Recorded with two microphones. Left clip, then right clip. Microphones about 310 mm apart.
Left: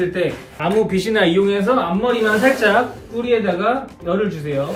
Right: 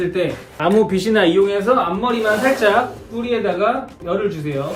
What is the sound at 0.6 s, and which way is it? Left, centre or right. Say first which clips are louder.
Speech: right 2 dB; right.